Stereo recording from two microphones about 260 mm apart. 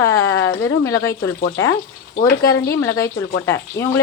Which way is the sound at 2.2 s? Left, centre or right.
Centre.